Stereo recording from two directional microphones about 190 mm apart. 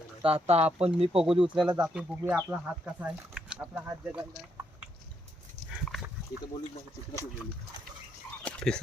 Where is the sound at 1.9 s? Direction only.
5° right (ahead or behind).